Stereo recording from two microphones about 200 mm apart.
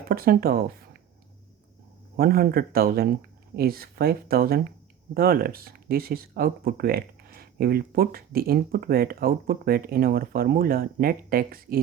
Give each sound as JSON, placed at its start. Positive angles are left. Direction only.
{"t": 0.1, "sound": "speech", "side_deg": -50}
{"t": 2.1, "sound": "speech", "side_deg": -50}